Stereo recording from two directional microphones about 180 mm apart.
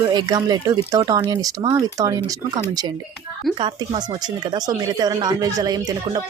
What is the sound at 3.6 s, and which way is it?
Speech, 25° right (ahead or behind).